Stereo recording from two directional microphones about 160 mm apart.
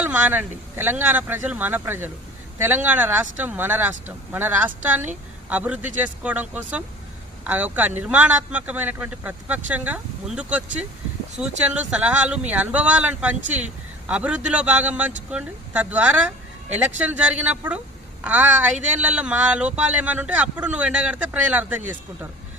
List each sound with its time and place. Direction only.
0.0 s speech: 10° right (ahead or behind)